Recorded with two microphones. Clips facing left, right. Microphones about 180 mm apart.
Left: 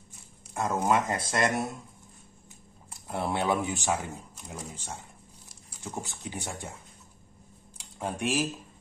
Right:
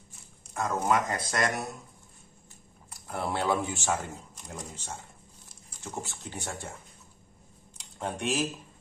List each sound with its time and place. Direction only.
0.6 s speech: 20° left (ahead or behind)
2.9 s speech: 20° left (ahead or behind)
3.9 s speech: 5° left (ahead or behind)
6.0 s speech: 15° left (ahead or behind)
7.7 s computer keyboard: 10° left (ahead or behind)